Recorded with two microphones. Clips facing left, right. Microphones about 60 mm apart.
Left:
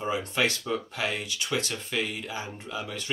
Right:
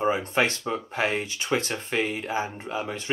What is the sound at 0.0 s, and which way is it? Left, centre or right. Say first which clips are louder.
Speech: right 4 dB; right.